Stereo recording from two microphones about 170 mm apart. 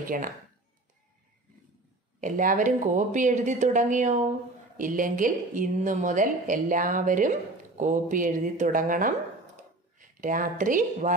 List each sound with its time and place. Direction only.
0.0 s speech: 55° right (ahead or behind)
2.1 s a woman's voice: 50° right (ahead or behind)